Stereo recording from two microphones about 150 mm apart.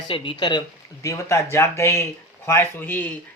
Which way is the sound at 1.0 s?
20° left (ahead or behind).